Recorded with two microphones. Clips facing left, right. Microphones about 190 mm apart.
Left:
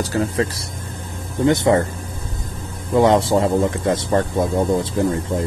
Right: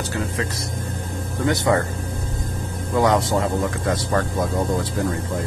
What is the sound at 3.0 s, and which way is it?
Speech, 30° left (ahead or behind).